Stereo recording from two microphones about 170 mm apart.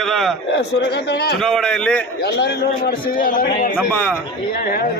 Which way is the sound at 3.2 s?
55° left (ahead or behind).